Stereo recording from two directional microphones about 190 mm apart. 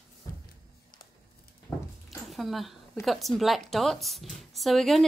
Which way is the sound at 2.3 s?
Centre (ahead or behind).